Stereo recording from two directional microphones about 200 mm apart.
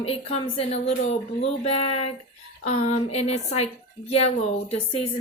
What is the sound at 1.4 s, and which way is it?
Speech, 30° left (ahead or behind).